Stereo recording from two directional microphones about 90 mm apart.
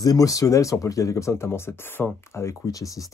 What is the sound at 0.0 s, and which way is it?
Speech, 40° left (ahead or behind).